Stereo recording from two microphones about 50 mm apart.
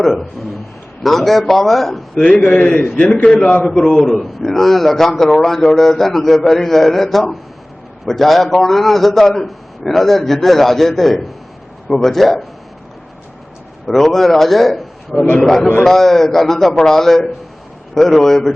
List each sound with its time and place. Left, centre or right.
0.0 s a man's voice: centre
2.5 s a man's voice: centre
3.8 s a man's voice: centre
13.8 s a man's voice: centre